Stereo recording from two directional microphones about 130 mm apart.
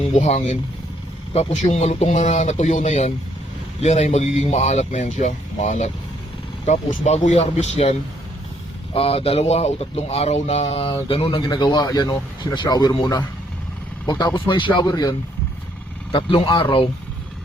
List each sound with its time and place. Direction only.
0.2 s speech: 55° left (ahead or behind); by 13.2 s 35° left (ahead or behind)
14.3 s a man's voice: 40° left (ahead or behind)
16.1 s a man's voice: 40° left (ahead or behind)